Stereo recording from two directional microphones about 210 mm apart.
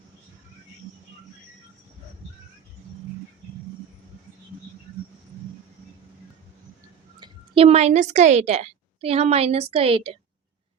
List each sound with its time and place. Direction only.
7.2 s a woman's voice: 25° right (ahead or behind)